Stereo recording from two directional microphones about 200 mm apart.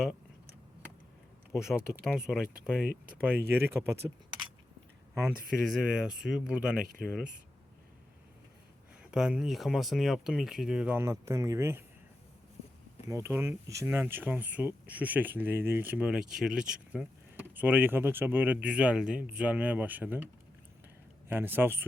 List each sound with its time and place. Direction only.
1.5 s speech: 5° right (ahead or behind)
5.2 s speech: 5° right (ahead or behind)
9.0 s speech: 5° right (ahead or behind)
13.1 s speech: 15° right (ahead or behind)
21.2 s speech: 10° right (ahead or behind)